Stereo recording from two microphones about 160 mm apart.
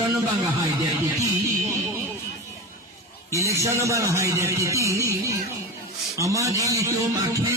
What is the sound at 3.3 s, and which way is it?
A man's voice, 20° right (ahead or behind).